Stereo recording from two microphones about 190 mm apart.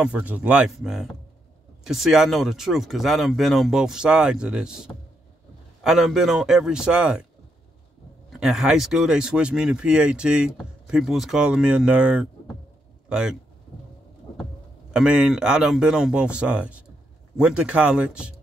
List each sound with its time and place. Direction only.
0.0 s speech: 10° right (ahead or behind)
8.3 s speech: centre (ahead or behind)
14.9 s speech: 5° right (ahead or behind)